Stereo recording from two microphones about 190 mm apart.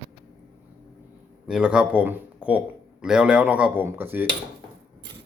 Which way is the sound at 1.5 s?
5° right (ahead or behind).